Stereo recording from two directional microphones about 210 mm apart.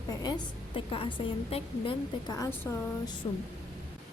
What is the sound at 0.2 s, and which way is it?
A woman's voice, 20° left (ahead or behind).